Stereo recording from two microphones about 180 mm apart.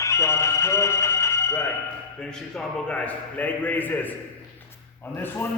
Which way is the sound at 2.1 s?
5° left (ahead or behind).